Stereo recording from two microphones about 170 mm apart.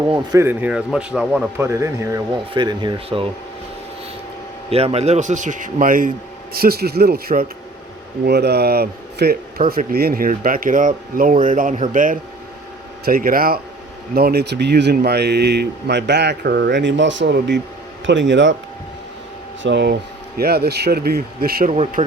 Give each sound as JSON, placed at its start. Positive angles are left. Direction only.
{"t": 0.1, "sound": "speech", "side_deg": -25}
{"t": 1.5, "sound": "speech", "side_deg": -15}
{"t": 4.7, "sound": "a man's voice", "side_deg": -35}
{"t": 8.2, "sound": "speech", "side_deg": -75}
{"t": 19.6, "sound": "speech", "side_deg": -85}
{"t": 21.7, "sound": "speech", "side_deg": -40}